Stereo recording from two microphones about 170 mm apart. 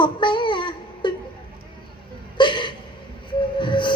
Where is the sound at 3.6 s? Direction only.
30° left (ahead or behind).